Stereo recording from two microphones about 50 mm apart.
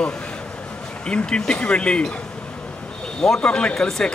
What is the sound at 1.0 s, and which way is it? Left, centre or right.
Speech, centre.